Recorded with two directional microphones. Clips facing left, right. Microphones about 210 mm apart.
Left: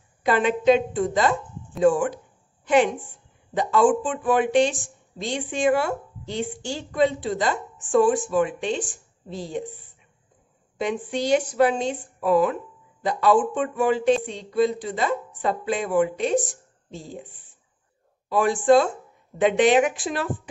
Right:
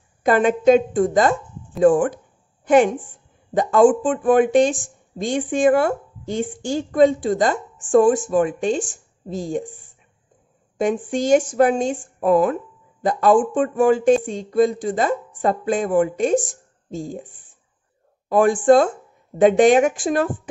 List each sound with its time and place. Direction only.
0.2 s a woman's voice: 45° right (ahead or behind)
10.8 s speech: 45° right (ahead or behind)